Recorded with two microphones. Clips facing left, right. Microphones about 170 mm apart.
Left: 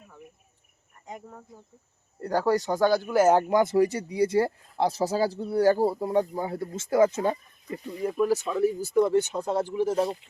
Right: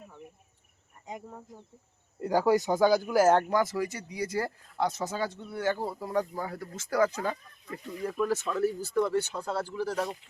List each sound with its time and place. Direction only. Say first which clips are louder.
1.0 s speech: even; 15° right (ahead or behind)
3.5 s speech: left 7 dB; 25° left (ahead or behind)
8.3 s speech: left 4 dB; 15° left (ahead or behind)